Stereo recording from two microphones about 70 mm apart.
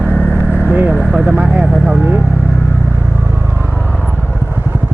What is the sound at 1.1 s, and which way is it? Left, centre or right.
Speech, centre.